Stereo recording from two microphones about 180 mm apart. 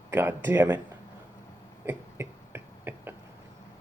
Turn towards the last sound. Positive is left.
turn(degrees=-10)  # may be behind; listen again after turning